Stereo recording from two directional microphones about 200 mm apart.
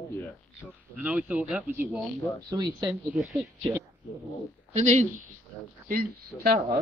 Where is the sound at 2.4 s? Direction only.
20° right (ahead or behind).